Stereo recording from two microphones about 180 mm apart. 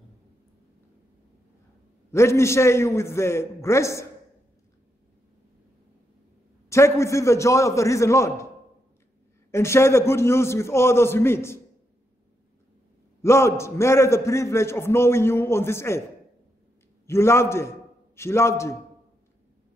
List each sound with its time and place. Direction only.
2.0 s a man's voice: 15° left (ahead or behind)
6.7 s a man's voice: 15° left (ahead or behind)
9.5 s a man's voice: 15° left (ahead or behind)
13.2 s a man's voice: 15° left (ahead or behind)
17.0 s a man's voice: 15° left (ahead or behind)